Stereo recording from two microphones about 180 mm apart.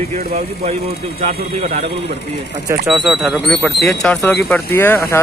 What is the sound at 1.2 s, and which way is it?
Speech, 40° right (ahead or behind).